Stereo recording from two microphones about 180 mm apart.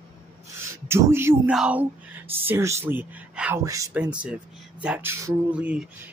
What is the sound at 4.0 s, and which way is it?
Speech, 5° right (ahead or behind).